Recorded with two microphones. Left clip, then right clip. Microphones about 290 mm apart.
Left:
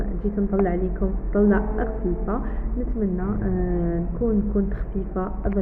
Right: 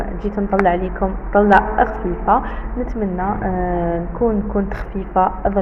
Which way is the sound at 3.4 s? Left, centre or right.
Right.